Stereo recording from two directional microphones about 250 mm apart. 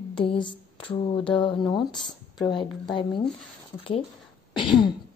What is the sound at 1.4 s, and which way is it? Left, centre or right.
Speech, centre.